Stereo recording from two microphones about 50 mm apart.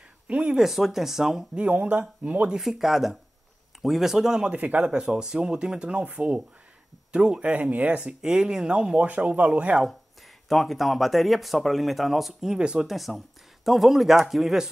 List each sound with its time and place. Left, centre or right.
0.3 s speech: right
0.6 s speech: centre
1.5 s speech: right
2.5 s speech: centre
4.6 s speech: right
8.0 s speech: centre
10.5 s speech: centre
12.5 s speech: centre
12.8 s speech: centre